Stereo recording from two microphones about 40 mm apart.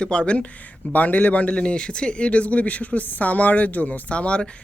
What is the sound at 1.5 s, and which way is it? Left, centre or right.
Speech, left.